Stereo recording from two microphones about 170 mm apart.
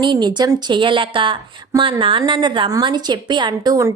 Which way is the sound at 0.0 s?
25° right (ahead or behind).